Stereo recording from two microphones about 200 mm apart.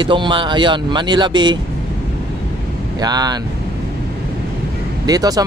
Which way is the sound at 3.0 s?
20° right (ahead or behind).